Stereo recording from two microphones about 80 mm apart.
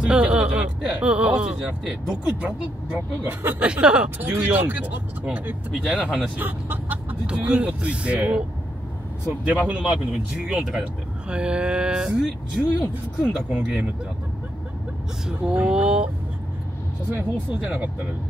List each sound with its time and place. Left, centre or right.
0.0 s speech: centre
5.7 s speech: centre
6.3 s music: right
7.2 s speech: centre
9.5 s speech: centre
15.2 s speech: centre
17.1 s speech: centre